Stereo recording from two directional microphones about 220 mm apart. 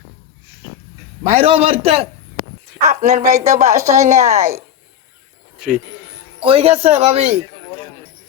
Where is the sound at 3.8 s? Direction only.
15° right (ahead or behind).